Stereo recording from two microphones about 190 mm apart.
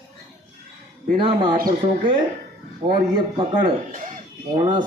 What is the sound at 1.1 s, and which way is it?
Speech, 25° right (ahead or behind).